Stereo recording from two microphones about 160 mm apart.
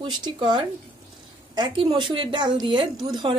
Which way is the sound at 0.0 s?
30° right (ahead or behind).